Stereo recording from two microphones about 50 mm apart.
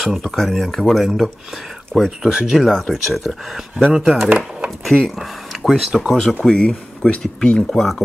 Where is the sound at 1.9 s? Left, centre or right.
Centre.